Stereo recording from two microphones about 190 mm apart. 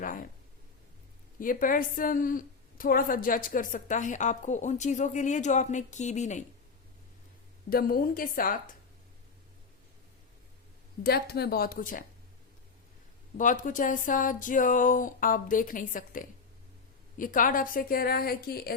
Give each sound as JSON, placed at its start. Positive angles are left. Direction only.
{"t": 0.0, "sound": "speech", "side_deg": 45}
{"t": 1.4, "sound": "a woman's voice", "side_deg": 45}
{"t": 7.7, "sound": "speech", "side_deg": 50}
{"t": 11.0, "sound": "speech", "side_deg": 55}
{"t": 13.3, "sound": "speech", "side_deg": 45}